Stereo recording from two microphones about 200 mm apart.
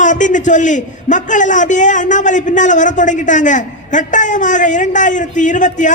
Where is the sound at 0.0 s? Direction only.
40° left (ahead or behind).